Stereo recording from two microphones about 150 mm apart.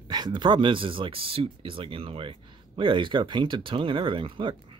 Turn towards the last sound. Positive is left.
turn(degrees=-35)  # may be behind; listen again after turning